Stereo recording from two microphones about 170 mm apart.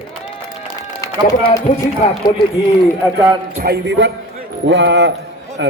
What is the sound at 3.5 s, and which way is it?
A man's voice, 65° right (ahead or behind).